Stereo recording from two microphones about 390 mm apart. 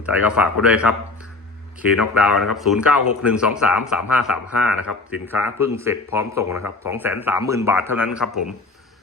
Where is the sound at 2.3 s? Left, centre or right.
Left.